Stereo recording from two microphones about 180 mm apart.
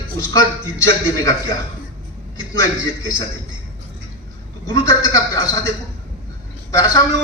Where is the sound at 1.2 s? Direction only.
20° left (ahead or behind).